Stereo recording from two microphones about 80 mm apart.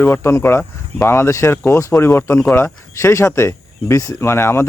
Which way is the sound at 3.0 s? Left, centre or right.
Left.